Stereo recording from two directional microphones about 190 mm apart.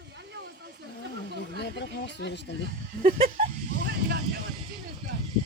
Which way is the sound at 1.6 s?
65° left (ahead or behind).